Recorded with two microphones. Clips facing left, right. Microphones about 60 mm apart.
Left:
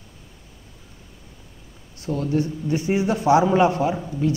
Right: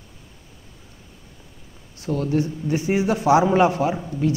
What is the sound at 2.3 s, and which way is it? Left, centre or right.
A woman's voice, right.